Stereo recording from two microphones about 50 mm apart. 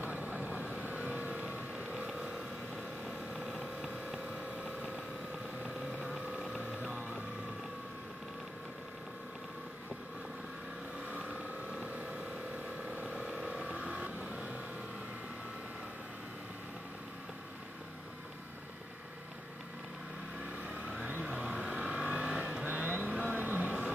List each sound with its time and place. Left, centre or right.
0.0 s vehicle: right
2.7 s vehicle: centre
4.6 s a sound: right
11.1 s vehicle: right
20.6 s vehicle: right
22.7 s vehicle: right